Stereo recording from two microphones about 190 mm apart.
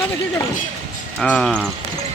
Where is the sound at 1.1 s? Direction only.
Centre (ahead or behind).